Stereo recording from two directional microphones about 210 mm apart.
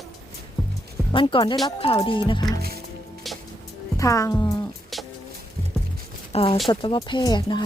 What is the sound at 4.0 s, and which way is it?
Speech, 15° left (ahead or behind).